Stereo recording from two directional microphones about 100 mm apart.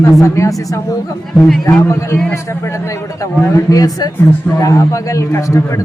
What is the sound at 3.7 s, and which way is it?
A man's voice, 40° left (ahead or behind).